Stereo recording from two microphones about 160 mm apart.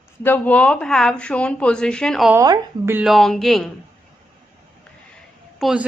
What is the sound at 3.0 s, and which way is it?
Speech, centre (ahead or behind).